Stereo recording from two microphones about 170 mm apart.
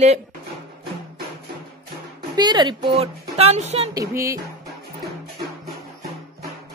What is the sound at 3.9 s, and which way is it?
Music, 20° right (ahead or behind).